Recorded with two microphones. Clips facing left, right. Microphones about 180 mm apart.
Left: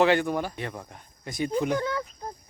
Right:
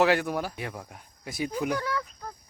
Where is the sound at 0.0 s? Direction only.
5° right (ahead or behind).